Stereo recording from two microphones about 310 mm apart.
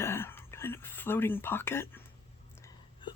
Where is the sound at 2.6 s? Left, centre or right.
Centre.